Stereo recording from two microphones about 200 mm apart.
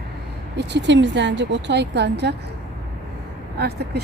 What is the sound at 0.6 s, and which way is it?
Speech, 60° right (ahead or behind).